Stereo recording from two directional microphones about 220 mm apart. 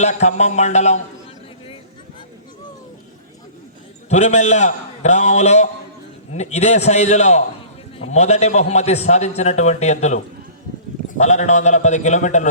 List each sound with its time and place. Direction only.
0.0 s a man's voice: 30° left (ahead or behind)
4.1 s a man's voice: 30° left (ahead or behind)